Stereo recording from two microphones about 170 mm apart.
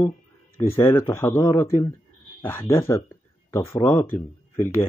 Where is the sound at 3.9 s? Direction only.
15° left (ahead or behind).